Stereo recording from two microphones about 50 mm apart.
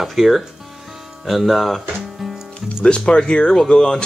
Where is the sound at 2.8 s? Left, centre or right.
Left.